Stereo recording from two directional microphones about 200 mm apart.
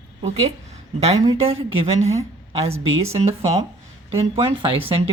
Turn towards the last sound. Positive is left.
turn(degrees=-30)  # may be behind; listen again after turning